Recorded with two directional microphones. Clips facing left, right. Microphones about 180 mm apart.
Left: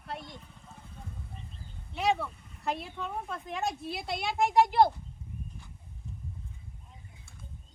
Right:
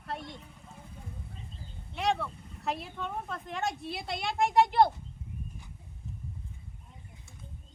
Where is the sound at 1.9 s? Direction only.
Centre (ahead or behind).